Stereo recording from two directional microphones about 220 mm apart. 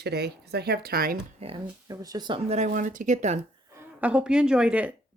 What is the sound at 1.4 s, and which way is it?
Speech, 20° right (ahead or behind).